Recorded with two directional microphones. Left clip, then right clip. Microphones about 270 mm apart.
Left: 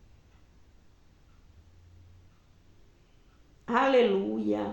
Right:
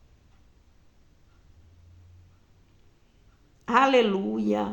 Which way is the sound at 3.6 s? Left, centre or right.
Right.